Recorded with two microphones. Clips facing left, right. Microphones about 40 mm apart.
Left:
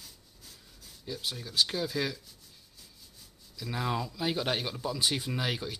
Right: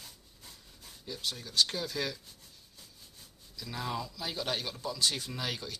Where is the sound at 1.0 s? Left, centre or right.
Centre.